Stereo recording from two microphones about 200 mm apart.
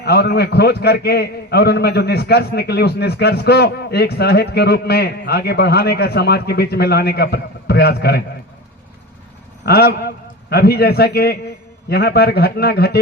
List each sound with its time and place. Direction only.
0.0 s a man's voice: 55° left (ahead or behind)
9.6 s a man's voice: 55° left (ahead or behind)